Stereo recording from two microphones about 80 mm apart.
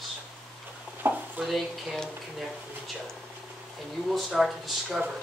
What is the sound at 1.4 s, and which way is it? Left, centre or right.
Speech, centre.